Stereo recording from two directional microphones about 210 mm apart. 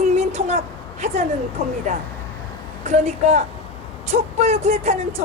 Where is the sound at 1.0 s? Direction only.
30° right (ahead or behind).